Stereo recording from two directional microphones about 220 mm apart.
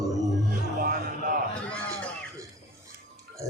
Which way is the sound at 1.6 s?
5° left (ahead or behind).